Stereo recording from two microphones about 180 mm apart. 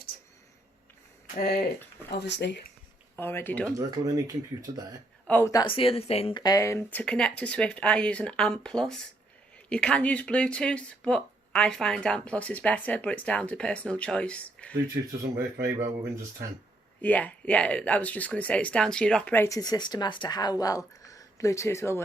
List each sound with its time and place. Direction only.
1.4 s speech: 55° left (ahead or behind)
2.1 s speech: 70° left (ahead or behind)
3.2 s speech: 10° left (ahead or behind)
3.8 s speech: 20° right (ahead or behind)
5.3 s speech: 15° left (ahead or behind)
5.6 s speech: 30° left (ahead or behind); by 14.8 s 5° left (ahead or behind)
15.5 s speech: 15° right (ahead or behind)
17.0 s speech: 10° left (ahead or behind)